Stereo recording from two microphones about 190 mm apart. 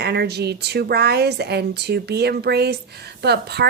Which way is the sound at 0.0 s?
60° right (ahead or behind).